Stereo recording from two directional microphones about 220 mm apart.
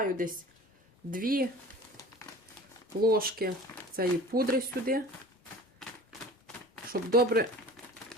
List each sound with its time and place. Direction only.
0.0 s a woman's voice: 40° right (ahead or behind)
3.0 s speech: 40° right (ahead or behind)
7.1 s speech: 45° right (ahead or behind)